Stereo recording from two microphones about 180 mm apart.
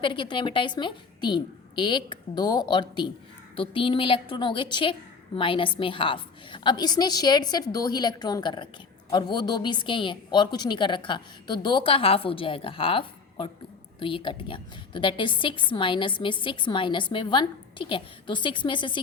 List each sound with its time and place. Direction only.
0.0 s a woman's voice: 25° left (ahead or behind)